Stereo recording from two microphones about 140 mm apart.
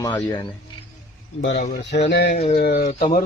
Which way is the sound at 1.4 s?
85° left.